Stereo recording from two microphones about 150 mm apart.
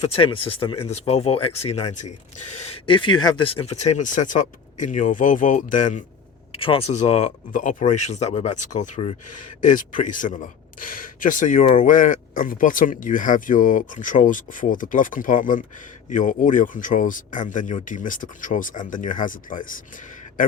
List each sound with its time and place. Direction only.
0.0 s speech: 40° left (ahead or behind)
2.8 s speech: 35° left (ahead or behind); by 6.0 s 55° left (ahead or behind)
6.6 s speech: 35° left (ahead or behind); by 19.8 s 65° left (ahead or behind)